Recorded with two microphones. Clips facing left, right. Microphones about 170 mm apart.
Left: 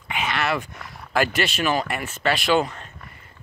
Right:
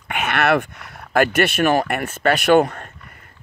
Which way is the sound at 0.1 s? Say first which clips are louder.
Right 6 dB; 60° right (ahead or behind).